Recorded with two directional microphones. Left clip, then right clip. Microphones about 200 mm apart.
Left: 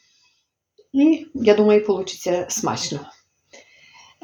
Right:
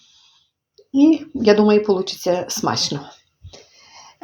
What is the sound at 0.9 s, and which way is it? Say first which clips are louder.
Speech: right 3 dB; 35° right (ahead or behind).